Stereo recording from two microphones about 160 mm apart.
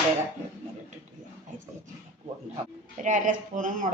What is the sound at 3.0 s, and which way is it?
Speech, 50° right (ahead or behind).